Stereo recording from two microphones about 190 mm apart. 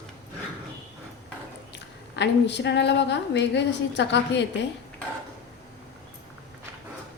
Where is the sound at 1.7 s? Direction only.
65° left (ahead or behind).